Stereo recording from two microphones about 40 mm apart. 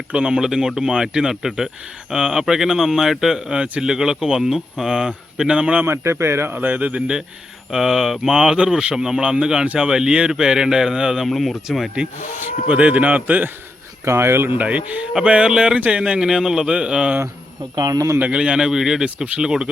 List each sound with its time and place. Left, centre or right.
0.1 s speech: right
5.8 s speech: right
6.6 s speech: right
7.7 s speech: centre
11.3 s speech: centre
12.6 s speech: right
14.2 s speech: right
14.6 s speech: right
15.1 s speech: right
16.2 s speech: centre
16.6 s speech: right
18.3 s speech: right